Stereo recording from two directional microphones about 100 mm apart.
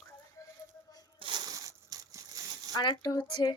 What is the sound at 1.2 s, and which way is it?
Speech, 50° right (ahead or behind).